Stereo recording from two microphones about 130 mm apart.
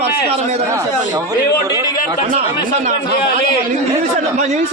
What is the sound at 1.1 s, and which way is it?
Speech, 25° right (ahead or behind).